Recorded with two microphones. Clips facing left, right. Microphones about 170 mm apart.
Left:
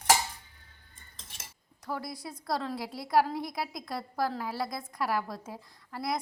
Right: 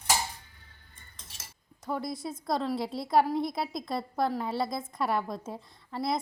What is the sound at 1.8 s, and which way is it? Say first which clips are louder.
A woman's voice: right 4 dB; 20° right (ahead or behind).